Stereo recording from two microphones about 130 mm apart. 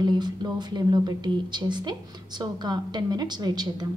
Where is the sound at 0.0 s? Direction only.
35° right (ahead or behind).